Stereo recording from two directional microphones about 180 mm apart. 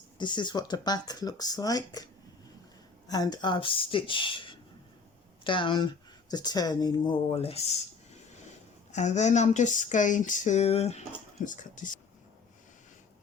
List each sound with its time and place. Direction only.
0.2 s speech: 25° left (ahead or behind)
3.1 s speech: 20° left (ahead or behind)
8.9 s speech: 40° left (ahead or behind)